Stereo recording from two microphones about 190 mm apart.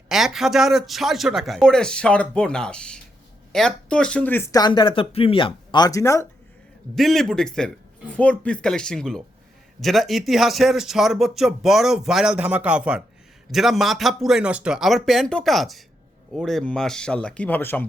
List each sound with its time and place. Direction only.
0.1 s speech: centre (ahead or behind); by 6.2 s 15° left (ahead or behind)
6.9 s speech: centre (ahead or behind)